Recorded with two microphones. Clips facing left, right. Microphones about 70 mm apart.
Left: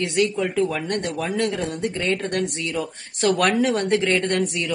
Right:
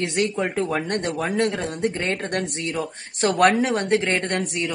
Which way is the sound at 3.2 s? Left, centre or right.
Right.